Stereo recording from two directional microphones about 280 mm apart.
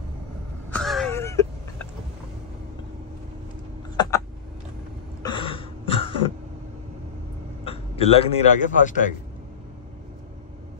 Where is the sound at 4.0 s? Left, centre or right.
Centre.